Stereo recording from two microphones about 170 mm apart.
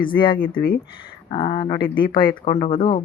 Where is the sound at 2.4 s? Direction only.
45° left (ahead or behind).